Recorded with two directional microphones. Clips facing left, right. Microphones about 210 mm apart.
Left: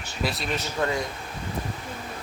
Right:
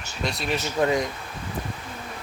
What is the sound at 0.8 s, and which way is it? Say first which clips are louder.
Speech: right 5 dB; 15° right (ahead or behind).